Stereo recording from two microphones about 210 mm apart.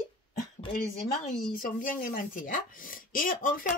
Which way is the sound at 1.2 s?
40° left (ahead or behind).